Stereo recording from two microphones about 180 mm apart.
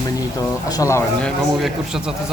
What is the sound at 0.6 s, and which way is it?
Speech, 20° left (ahead or behind).